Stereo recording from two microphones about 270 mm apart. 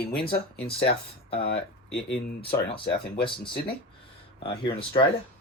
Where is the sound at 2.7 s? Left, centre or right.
Centre.